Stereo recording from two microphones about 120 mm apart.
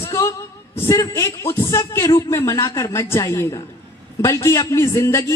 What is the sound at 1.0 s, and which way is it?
A woman's voice, 30° left (ahead or behind).